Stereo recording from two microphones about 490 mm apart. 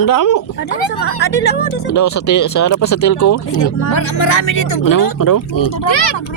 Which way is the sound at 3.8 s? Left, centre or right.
Left.